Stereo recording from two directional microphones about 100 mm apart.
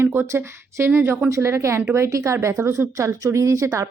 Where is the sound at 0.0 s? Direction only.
25° right (ahead or behind).